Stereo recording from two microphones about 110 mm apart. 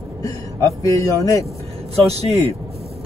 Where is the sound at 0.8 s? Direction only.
30° left (ahead or behind).